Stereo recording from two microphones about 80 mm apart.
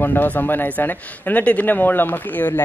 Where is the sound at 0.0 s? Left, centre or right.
Left.